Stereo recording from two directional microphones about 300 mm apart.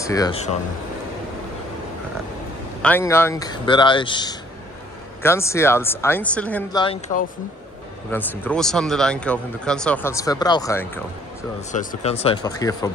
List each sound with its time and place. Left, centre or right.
0.0 s speech: centre
2.8 s speech: centre
8.1 s speech: centre
11.7 s speech: left